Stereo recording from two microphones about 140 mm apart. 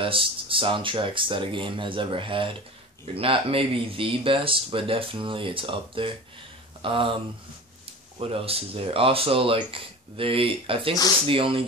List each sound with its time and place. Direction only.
0.0 s speech: 40° right (ahead or behind)
8.2 s speech: 45° right (ahead or behind)